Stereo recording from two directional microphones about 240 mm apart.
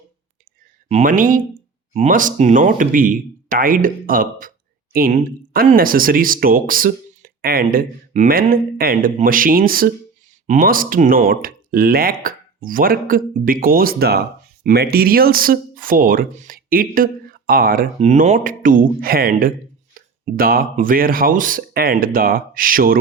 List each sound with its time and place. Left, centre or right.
0.9 s speech: right